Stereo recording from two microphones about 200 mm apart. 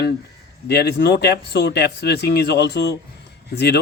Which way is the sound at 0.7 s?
55° left (ahead or behind).